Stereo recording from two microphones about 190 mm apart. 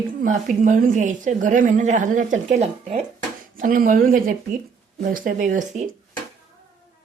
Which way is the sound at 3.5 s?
45° right (ahead or behind).